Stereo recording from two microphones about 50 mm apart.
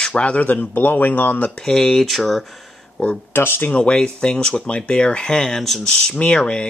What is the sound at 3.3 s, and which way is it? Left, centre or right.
Speech, left.